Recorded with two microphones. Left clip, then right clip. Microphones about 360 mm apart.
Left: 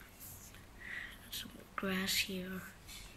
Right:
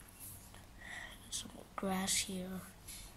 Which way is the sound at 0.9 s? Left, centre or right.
Centre.